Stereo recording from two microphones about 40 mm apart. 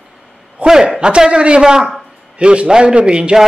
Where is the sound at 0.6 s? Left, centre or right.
Centre.